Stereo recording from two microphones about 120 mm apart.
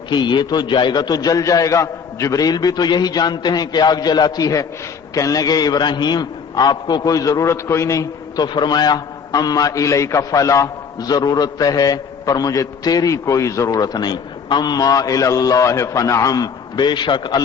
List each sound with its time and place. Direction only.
0.1 s a man's voice: 40° left (ahead or behind)